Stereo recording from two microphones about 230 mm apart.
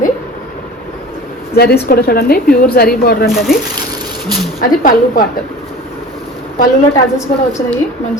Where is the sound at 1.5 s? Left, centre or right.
Left.